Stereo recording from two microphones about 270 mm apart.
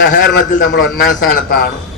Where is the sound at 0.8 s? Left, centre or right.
Centre.